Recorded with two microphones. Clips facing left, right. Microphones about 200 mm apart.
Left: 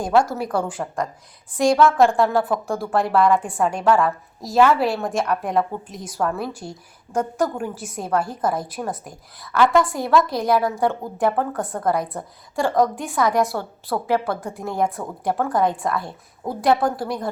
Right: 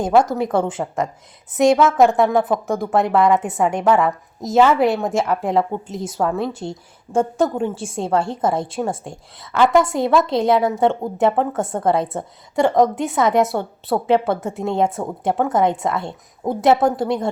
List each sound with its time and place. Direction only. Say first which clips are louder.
0.0 s a woman's voice: right 3 dB; 20° right (ahead or behind)